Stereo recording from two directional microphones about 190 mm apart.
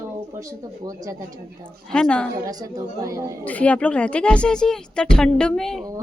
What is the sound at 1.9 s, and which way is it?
Speech, 5° left (ahead or behind).